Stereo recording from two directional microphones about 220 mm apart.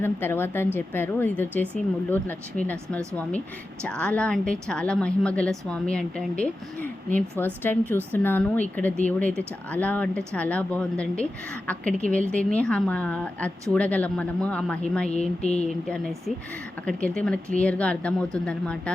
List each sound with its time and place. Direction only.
0.0 s a woman's voice: 10° left (ahead or behind)
15.1 s speech: 30° left (ahead or behind)
16.8 s a woman's voice: 5° left (ahead or behind)